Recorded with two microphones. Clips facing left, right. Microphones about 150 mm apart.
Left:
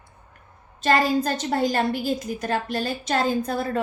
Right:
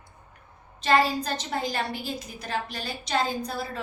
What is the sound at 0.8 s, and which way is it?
A woman's voice, 45° left (ahead or behind).